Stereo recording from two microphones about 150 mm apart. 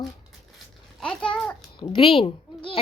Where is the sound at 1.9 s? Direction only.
40° left (ahead or behind).